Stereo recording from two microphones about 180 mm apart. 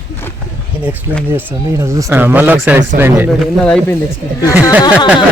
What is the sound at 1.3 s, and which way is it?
Speech, 15° right (ahead or behind).